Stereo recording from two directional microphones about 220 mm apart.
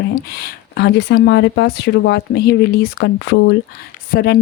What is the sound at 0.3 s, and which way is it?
Speech, 45° left (ahead or behind).